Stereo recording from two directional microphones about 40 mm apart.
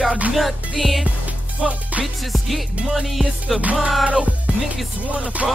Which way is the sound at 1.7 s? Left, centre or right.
Right.